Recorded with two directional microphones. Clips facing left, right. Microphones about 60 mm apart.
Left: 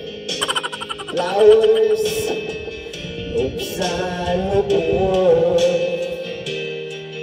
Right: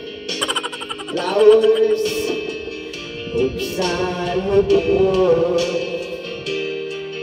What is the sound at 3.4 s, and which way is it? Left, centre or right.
Music, right.